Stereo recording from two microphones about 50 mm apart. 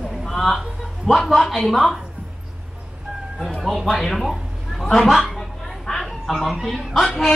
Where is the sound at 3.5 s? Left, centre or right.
Centre.